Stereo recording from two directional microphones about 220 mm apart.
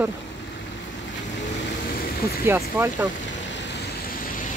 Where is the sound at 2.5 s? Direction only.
10° right (ahead or behind).